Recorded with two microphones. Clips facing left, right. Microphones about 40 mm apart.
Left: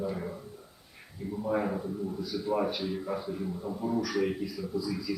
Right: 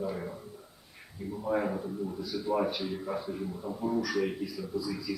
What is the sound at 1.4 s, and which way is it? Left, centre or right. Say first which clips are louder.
Speech: even; centre.